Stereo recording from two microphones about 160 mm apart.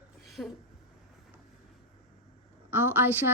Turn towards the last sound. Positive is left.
turn(degrees=-15)  # may be behind; listen again after turning